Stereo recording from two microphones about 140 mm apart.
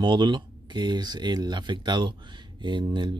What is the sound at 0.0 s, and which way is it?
Speech, 35° right (ahead or behind).